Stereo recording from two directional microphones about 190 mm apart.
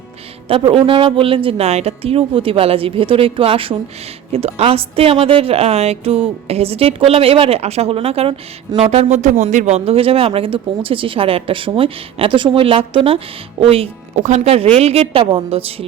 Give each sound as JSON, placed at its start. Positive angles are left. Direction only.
{"t": 0.4, "sound": "a woman's voice", "side_deg": -30}